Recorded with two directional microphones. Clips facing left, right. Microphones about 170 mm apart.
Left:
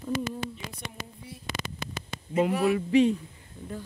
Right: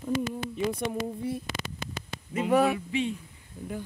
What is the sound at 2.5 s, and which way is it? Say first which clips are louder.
Speech: right 6 dB; 65° right (ahead or behind).